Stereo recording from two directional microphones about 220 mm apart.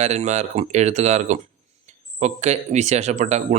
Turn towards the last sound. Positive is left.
turn(degrees=-30)  # may be behind; listen again after turning